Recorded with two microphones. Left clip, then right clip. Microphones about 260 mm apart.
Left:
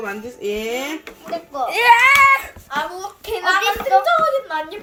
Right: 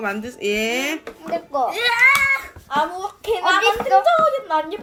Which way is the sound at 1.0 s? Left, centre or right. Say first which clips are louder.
Right 2 dB; right.